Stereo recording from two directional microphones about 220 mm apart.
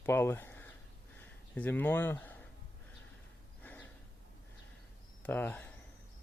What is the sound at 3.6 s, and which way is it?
Snort, 10° left (ahead or behind).